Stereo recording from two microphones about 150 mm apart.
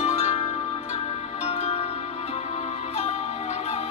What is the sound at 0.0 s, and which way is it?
Music, 45° left (ahead or behind).